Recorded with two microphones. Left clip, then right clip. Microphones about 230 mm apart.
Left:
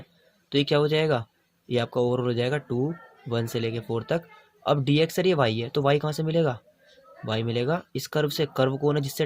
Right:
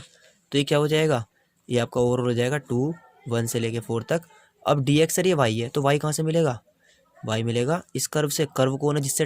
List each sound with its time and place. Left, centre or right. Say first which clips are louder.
0.5 s speech: right 1 dB; right